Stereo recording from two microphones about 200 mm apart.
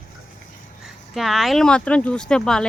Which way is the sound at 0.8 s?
Centre (ahead or behind).